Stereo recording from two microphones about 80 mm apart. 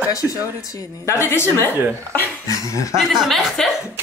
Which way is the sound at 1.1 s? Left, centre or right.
Left.